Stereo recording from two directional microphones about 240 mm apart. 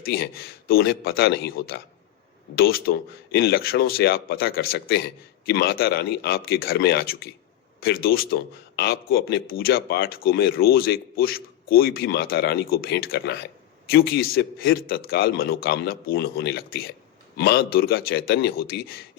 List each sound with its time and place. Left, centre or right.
0.0 s a man's voice: left